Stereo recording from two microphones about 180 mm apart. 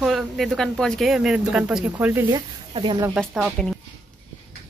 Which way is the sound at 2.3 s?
25° right (ahead or behind).